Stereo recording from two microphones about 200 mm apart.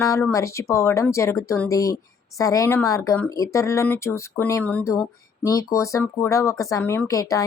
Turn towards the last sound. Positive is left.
turn(degrees=15)  # may be behind; listen again after turning